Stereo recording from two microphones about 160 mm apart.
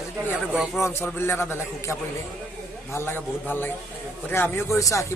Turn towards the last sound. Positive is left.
turn(degrees=20)  # may be behind; listen again after turning